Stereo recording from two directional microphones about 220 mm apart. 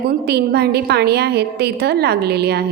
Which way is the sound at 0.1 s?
45° right (ahead or behind).